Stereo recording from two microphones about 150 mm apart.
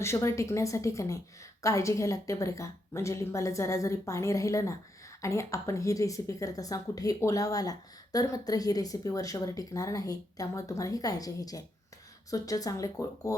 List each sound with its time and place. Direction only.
0.0 s speech: 20° left (ahead or behind)